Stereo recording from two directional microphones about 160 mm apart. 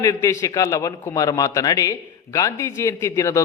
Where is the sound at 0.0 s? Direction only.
20° left (ahead or behind).